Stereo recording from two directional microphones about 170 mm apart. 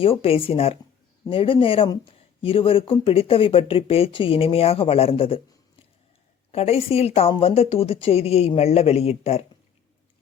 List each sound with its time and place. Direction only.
0.0 s speech: 35° left (ahead or behind)
6.5 s speech: 35° left (ahead or behind)